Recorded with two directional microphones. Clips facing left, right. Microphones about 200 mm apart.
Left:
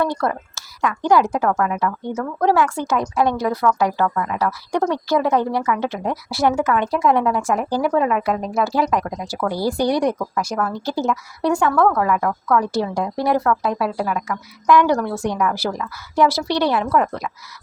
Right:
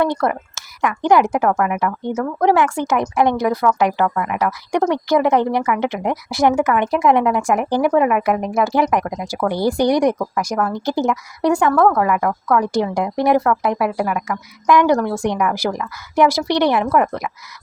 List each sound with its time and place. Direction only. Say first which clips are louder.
0.0 s a woman's voice: right 3 dB; 20° right (ahead or behind)